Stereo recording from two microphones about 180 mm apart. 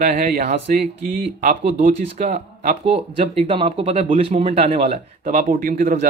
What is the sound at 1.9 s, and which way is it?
Speech, 40° right (ahead or behind).